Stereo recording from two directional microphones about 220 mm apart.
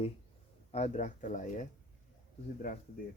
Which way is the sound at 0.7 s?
30° left (ahead or behind).